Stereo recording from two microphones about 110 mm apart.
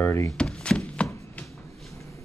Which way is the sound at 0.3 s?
10° left (ahead or behind).